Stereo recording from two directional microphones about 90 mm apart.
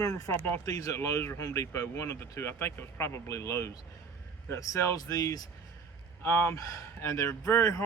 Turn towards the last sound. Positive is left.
turn(degrees=30)  # may be behind; listen again after turning